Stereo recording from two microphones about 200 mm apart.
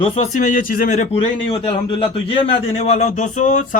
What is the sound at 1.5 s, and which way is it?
A man's voice, 25° left (ahead or behind).